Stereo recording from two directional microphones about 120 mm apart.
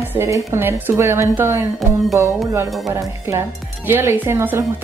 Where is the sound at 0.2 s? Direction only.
20° right (ahead or behind).